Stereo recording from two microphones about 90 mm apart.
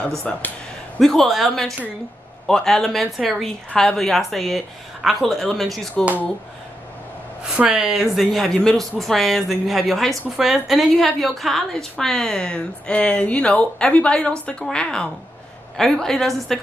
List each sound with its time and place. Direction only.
0.2 s speech: 15° left (ahead or behind)
0.9 s speech: 5° left (ahead or behind)
7.5 s speech: 5° right (ahead or behind)